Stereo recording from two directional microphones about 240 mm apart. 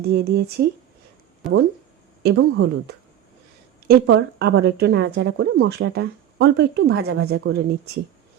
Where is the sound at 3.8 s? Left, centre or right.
Right.